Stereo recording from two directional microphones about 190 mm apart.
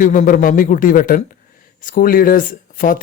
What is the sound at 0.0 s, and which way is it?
Speech, 45° left (ahead or behind).